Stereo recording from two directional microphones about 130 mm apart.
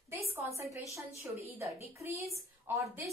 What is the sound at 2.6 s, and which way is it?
Speech, 20° right (ahead or behind).